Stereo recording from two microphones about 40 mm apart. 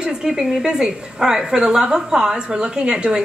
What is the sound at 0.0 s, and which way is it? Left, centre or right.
Speech, centre.